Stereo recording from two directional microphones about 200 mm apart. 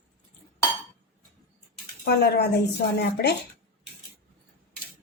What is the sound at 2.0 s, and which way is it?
A woman's voice, 50° left (ahead or behind).